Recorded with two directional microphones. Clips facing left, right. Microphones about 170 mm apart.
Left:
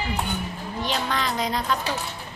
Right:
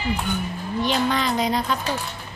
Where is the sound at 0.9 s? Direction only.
5° right (ahead or behind).